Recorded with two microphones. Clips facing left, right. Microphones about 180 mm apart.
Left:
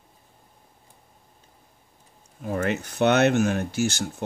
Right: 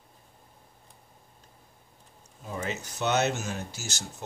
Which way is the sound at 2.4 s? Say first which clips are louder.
Left 8 dB; 60° left (ahead or behind).